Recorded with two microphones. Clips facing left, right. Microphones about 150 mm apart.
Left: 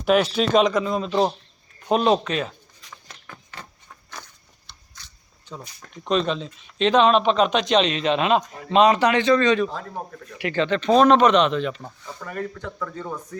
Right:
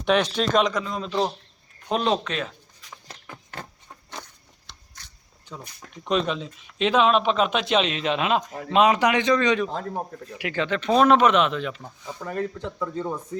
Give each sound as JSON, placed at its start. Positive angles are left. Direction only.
{"t": 0.0, "sound": "speech", "side_deg": 5}
{"t": 4.7, "sound": "biting", "side_deg": -90}
{"t": 5.5, "sound": "speech", "side_deg": -10}
{"t": 12.2, "sound": "speech", "side_deg": -25}